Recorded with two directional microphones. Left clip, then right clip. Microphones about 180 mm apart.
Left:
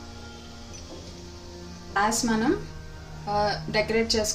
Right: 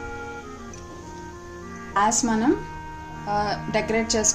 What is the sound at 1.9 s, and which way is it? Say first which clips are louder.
A woman's voice: right 3 dB; 35° right (ahead or behind).